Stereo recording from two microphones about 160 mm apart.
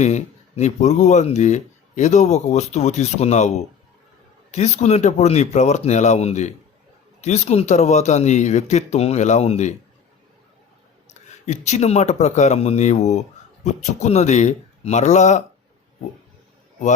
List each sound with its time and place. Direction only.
0.0 s speech: 45° left (ahead or behind)
11.4 s speech: 45° left (ahead or behind)